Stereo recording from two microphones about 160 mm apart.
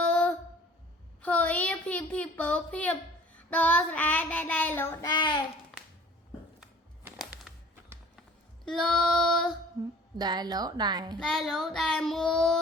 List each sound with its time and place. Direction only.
0.0 s a sound: 10° left (ahead or behind)
1.2 s a woman's voice: 10° left (ahead or behind)
5.0 s a child's voice: 30° left (ahead or behind)
5.7 s a sound: centre (ahead or behind)
8.6 s child singing: 5° left (ahead or behind)
9.8 s a woman's voice: 20° right (ahead or behind)
11.2 s child singing: centre (ahead or behind)